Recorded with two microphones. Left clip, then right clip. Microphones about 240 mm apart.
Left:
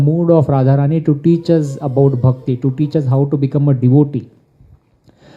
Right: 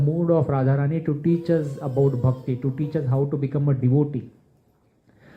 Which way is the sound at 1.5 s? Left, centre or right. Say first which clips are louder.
Left 8 dB; left.